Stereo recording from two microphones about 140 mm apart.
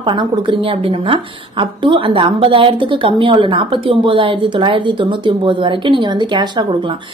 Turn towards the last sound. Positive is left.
turn(degrees=-35)  # may be behind; listen again after turning